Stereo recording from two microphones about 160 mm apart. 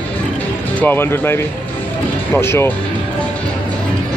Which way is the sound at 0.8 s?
15° left (ahead or behind).